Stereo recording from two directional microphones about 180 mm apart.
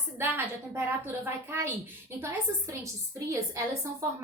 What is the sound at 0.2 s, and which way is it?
A woman's voice, 10° right (ahead or behind).